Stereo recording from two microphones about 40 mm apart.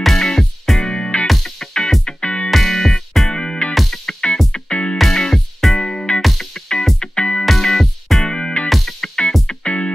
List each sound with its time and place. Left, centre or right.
0.2 s music: centre
0.7 s music: centre
1.2 s music: centre
1.6 s music: centre
2.5 s music: centre
3.3 s music: left
4.9 s music: centre
5.8 s music: centre
7.4 s music: centre
8.2 s music: centre
8.6 s music: centre
9.0 s music: centre